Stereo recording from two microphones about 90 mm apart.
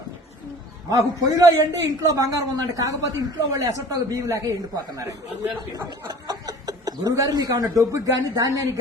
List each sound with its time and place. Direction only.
0.9 s a man's voice: 40° right (ahead or behind)